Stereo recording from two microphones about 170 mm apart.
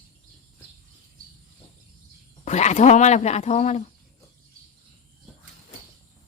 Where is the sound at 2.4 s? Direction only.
40° left (ahead or behind).